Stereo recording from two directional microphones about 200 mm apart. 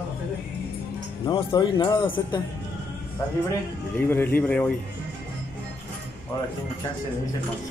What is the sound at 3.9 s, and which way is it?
Speech, 10° left (ahead or behind).